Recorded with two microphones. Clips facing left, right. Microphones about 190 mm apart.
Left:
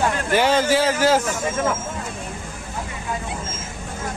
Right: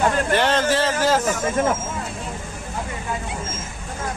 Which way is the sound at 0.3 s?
5° left (ahead or behind).